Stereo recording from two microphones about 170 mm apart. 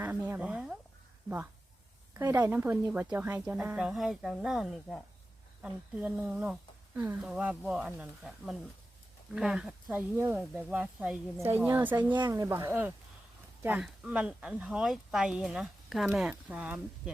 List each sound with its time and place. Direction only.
0.0 s a sound: 10° right (ahead or behind)
2.1 s speech: 15° right (ahead or behind)
12.1 s speech: 25° right (ahead or behind); by 16.8 s 5° right (ahead or behind)